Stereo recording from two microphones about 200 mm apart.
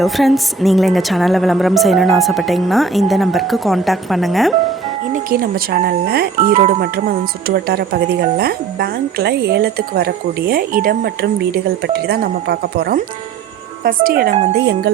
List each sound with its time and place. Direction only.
0.0 s a woman's voice: centre (ahead or behind)
5.1 s speech: 45° right (ahead or behind)